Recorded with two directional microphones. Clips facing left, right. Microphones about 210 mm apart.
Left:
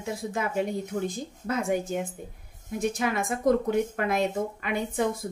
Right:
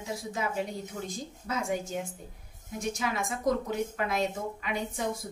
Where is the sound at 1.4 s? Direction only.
55° left (ahead or behind).